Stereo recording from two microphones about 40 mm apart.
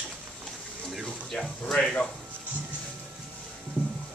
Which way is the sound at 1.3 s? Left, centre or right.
Left.